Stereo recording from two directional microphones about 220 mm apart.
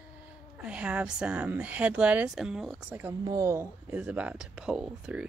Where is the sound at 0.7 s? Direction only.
5° right (ahead or behind).